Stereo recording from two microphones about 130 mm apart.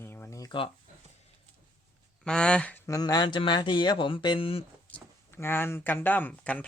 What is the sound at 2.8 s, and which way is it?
Speech, 30° left (ahead or behind).